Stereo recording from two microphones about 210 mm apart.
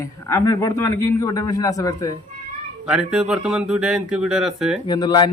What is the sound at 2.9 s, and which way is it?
Speech, 5° right (ahead or behind).